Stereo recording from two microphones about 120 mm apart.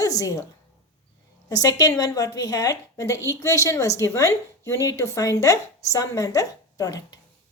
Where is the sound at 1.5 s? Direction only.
30° left (ahead or behind).